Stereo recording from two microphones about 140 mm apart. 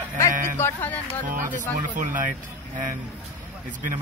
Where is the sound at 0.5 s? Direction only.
15° left (ahead or behind).